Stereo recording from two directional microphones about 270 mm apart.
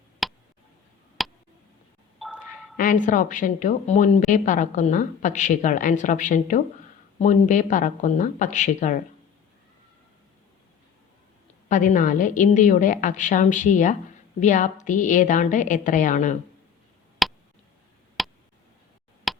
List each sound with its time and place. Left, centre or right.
0.2 s tick: centre
2.1 s a sound: centre
2.7 s a woman's voice: left
11.7 s a woman's voice: left
17.2 s tick: centre
18.2 s a sound: centre
19.3 s tick: centre